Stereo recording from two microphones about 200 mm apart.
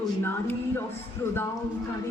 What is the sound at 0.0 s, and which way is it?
Speech, 10° left (ahead or behind).